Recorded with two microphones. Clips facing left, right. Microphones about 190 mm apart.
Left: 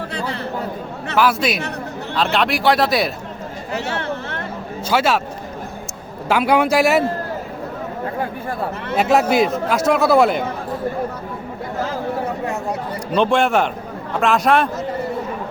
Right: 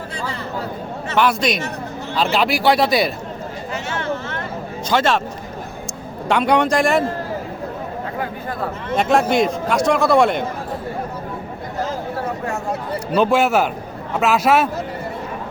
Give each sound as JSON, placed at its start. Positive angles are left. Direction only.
{"t": 1.1, "sound": "a man's voice", "side_deg": 5}
{"t": 3.7, "sound": "a sound", "side_deg": 60}
{"t": 4.9, "sound": "speech", "side_deg": 10}
{"t": 6.2, "sound": "a man's voice", "side_deg": 5}
{"t": 9.0, "sound": "a man's voice", "side_deg": 5}
{"t": 13.1, "sound": "a man's voice", "side_deg": -5}